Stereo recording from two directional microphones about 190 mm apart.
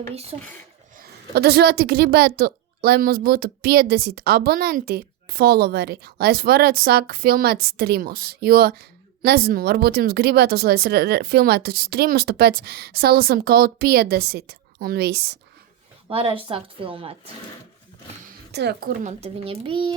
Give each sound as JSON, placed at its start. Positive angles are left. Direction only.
{"t": 0.1, "sound": "speech", "side_deg": -30}
{"t": 0.9, "sound": "a woman's voice", "side_deg": -55}
{"t": 16.0, "sound": "speech", "side_deg": -30}
{"t": 18.5, "sound": "a woman's voice", "side_deg": -60}
{"t": 19.2, "sound": "speech", "side_deg": -30}